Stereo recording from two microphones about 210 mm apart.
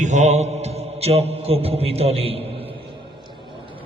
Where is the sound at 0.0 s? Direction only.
35° right (ahead or behind).